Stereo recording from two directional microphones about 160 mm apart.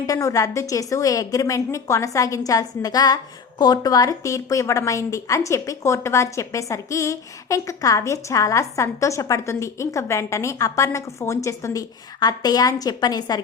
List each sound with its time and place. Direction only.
0.0 s a woman's voice: 20° left (ahead or behind)